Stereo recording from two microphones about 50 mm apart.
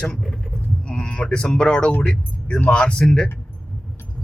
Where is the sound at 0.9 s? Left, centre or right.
Left.